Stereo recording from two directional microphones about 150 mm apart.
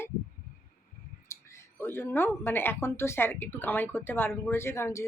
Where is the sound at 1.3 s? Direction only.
20° left (ahead or behind).